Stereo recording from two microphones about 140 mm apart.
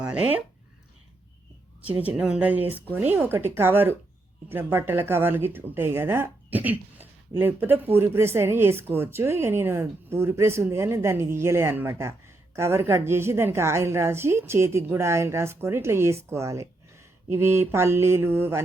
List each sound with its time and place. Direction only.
1.9 s a woman's voice: 10° right (ahead or behind)